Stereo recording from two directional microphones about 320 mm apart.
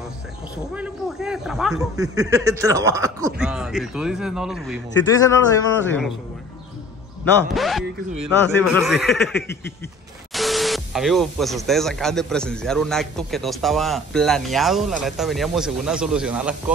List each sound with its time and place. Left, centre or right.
0.7 s speech: centre
7.5 s speech: centre